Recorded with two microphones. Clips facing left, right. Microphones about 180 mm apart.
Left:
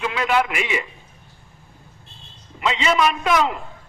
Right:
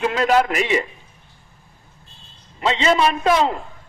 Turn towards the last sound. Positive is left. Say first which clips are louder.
# right 2 dB
turn(degrees=-30)  # may be behind; listen again after turning